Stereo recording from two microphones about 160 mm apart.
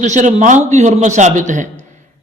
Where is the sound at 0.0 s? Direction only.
50° right (ahead or behind).